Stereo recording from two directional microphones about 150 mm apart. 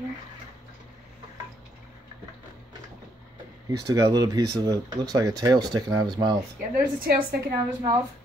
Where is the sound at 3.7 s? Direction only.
25° right (ahead or behind).